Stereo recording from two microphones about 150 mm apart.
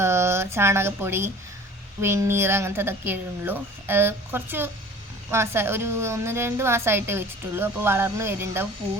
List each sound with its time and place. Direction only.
0.0 s a woman's voice: 15° right (ahead or behind)